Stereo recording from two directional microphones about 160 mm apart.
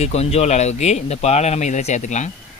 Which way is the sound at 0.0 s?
40° left (ahead or behind).